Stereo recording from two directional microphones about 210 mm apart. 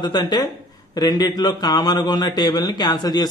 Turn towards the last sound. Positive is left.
turn(degrees=20)  # may be behind; listen again after turning